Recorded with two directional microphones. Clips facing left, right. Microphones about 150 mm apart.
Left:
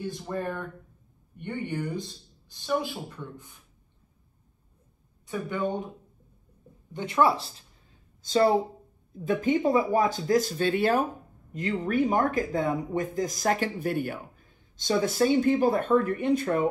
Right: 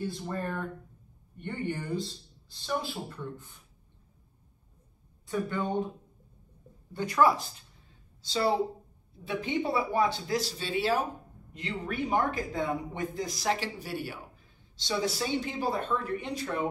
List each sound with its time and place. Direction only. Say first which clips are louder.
1.4 s speech: left 3 dB; 15° left (ahead or behind)
5.2 s a woman's voice: even; 20° left (ahead or behind)
6.9 s a woman's voice: left 1 dB; 20° left (ahead or behind)
8.2 s a woman's voice: left 5 dB; 50° left (ahead or behind)